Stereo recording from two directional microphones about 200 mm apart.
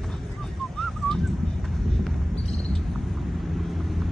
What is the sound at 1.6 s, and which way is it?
Run, centre (ahead or behind).